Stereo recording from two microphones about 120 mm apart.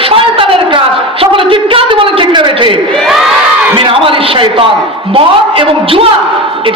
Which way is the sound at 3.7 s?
45° right (ahead or behind).